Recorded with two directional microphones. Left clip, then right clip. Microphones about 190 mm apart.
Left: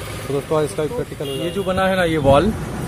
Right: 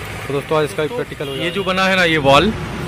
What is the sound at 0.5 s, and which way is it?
Speech, 5° left (ahead or behind).